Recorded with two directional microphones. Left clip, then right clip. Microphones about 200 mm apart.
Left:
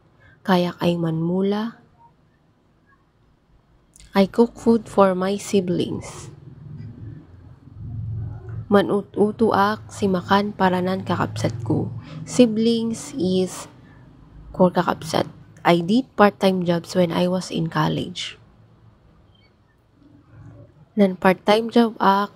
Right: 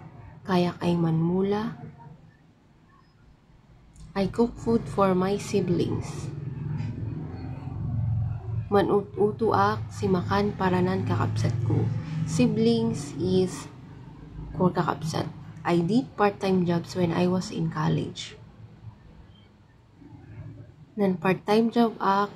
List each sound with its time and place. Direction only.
0.4 s a woman's voice: 40° left (ahead or behind)
4.1 s a woman's voice: 40° left (ahead or behind)
8.6 s a woman's voice: 35° left (ahead or behind)
21.0 s a woman's voice: 40° left (ahead or behind)